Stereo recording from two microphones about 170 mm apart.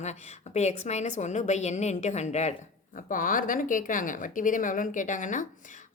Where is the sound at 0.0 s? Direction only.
40° left (ahead or behind).